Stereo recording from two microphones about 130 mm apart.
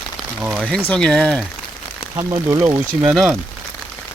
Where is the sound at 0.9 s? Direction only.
5° left (ahead or behind).